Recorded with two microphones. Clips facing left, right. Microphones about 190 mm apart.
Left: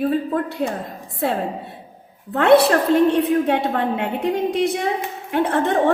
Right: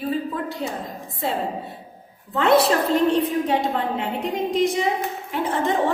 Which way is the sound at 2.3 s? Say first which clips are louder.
Left 4 dB; 65° left (ahead or behind).